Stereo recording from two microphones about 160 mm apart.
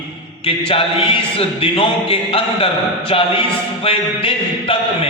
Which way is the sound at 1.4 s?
35° left (ahead or behind).